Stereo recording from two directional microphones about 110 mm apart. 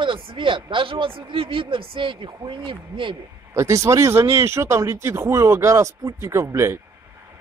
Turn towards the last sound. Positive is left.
turn(degrees=-25)  # may be behind; listen again after turning